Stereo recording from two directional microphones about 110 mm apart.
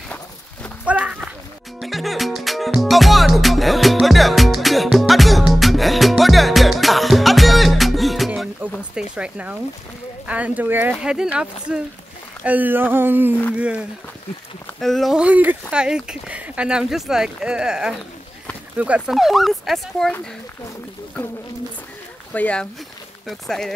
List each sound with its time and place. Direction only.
0.8 s walk: 10° right (ahead or behind)
1.8 s music: centre (ahead or behind)
8.9 s a sound: 10° right (ahead or behind)
10.2 s speech: 15° right (ahead or behind)
12.4 s speech: 15° right (ahead or behind)
14.8 s speech: centre (ahead or behind)
15.2 s speech: 15° right (ahead or behind)
22.3 s speech: 10° left (ahead or behind)